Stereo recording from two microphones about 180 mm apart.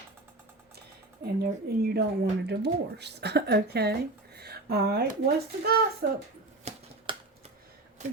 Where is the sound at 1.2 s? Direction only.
60° right (ahead or behind).